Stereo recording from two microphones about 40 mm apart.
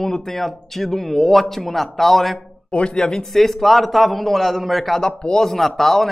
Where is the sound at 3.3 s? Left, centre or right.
Centre.